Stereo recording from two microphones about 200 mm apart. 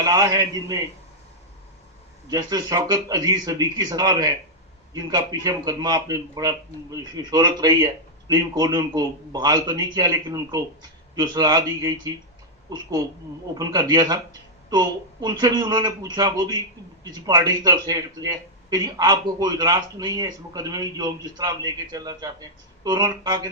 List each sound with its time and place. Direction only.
0.0 s a man's voice: 20° right (ahead or behind)
2.3 s a man's voice: 20° right (ahead or behind)